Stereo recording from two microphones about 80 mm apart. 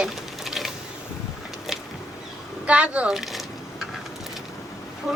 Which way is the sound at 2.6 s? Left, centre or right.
Centre.